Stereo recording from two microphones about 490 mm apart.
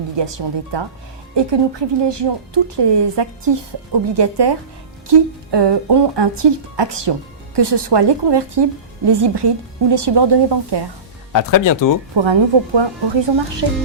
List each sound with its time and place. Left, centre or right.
0.2 s a woman's voice: right
11.3 s speech: left
12.1 s a woman's voice: right